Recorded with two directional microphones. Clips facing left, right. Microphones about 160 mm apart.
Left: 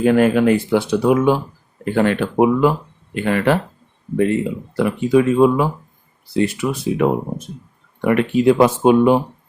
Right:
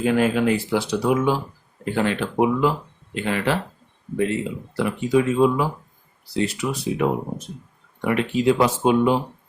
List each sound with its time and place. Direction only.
0.0 s speech: 55° left (ahead or behind)
4.8 s speech: 55° left (ahead or behind)